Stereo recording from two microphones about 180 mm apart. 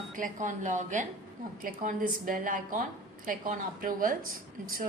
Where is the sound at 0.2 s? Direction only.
45° right (ahead or behind).